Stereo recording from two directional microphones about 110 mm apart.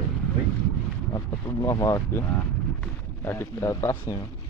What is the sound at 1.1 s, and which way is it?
Speech, 30° left (ahead or behind).